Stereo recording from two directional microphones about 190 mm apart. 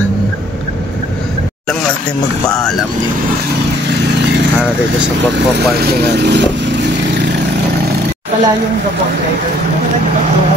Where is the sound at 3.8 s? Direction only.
65° right (ahead or behind).